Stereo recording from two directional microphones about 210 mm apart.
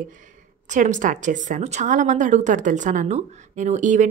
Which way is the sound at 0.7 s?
35° right (ahead or behind).